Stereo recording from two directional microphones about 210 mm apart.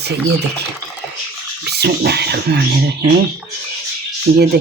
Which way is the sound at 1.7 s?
50° right (ahead or behind).